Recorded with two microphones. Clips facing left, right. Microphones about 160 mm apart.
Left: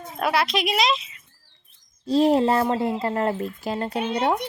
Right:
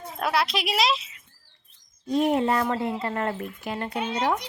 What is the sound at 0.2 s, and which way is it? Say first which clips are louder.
Speech: left 3 dB; centre (ahead or behind).